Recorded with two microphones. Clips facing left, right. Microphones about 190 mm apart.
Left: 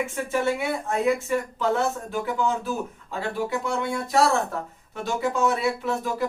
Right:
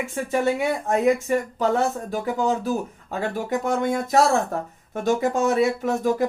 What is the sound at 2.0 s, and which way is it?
Speech, 40° right (ahead or behind).